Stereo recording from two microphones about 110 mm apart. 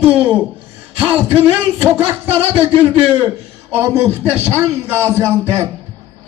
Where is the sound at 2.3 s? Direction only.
65° right (ahead or behind).